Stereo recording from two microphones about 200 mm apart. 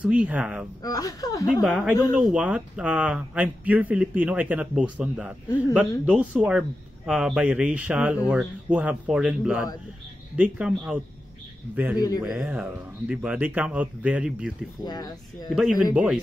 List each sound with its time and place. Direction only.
0.0 s speech: 5° right (ahead or behind)
0.8 s speech: 20° left (ahead or behind)
1.6 s speech: centre (ahead or behind)
14.9 s speech: 20° left (ahead or behind)
15.8 s speech: 5° right (ahead or behind)